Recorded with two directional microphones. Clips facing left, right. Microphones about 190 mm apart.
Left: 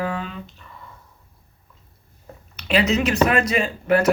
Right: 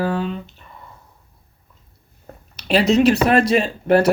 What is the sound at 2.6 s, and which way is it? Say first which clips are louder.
Speech: right 5 dB; 35° right (ahead or behind).